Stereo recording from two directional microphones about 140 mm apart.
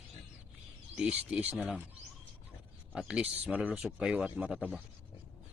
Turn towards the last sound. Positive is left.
turn(degrees=-10)  # may be behind; listen again after turning